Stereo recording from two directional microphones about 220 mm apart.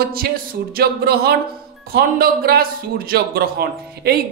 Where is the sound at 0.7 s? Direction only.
45° right (ahead or behind).